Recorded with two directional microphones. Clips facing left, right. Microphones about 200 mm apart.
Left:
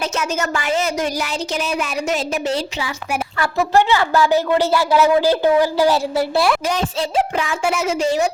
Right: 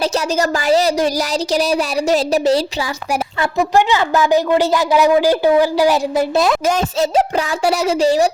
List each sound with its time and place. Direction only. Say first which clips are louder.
0.0 s speech: right 5 dB; 35° right (ahead or behind)
3.4 s a woman's voice: right 1 dB; 15° right (ahead or behind)
6.7 s speech: right 5 dB; 45° right (ahead or behind)